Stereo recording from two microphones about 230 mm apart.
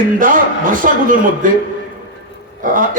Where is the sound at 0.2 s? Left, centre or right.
Right.